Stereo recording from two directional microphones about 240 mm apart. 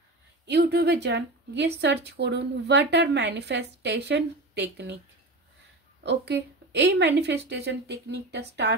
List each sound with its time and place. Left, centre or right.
0.5 s a woman's voice: right
6.0 s a woman's voice: right